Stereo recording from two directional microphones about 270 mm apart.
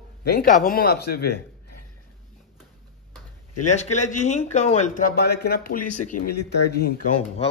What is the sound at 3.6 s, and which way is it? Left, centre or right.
A man's voice, left.